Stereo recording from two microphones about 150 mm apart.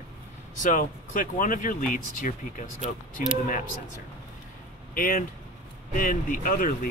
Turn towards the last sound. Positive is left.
turn(degrees=65)  # may be behind; listen again after turning